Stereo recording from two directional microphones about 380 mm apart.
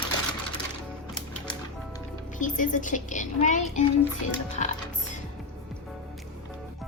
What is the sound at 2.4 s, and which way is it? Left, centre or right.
A woman's voice, centre.